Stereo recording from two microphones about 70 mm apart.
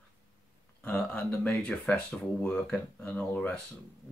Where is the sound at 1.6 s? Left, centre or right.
Centre.